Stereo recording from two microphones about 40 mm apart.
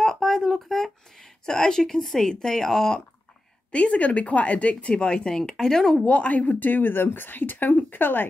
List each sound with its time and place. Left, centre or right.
0.0 s a sound: centre
1.4 s speech: centre
3.7 s speech: left
4.9 s speech: left
6.0 s speech: left